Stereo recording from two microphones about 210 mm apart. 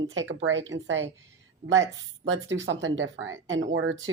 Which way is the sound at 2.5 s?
60° right (ahead or behind).